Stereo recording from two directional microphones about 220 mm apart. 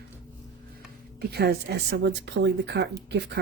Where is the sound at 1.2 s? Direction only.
45° right (ahead or behind).